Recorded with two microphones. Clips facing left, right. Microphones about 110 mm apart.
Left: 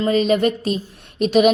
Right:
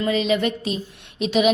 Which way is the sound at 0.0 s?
45° left (ahead or behind).